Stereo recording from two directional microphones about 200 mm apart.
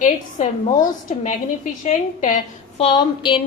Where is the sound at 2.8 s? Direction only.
25° left (ahead or behind).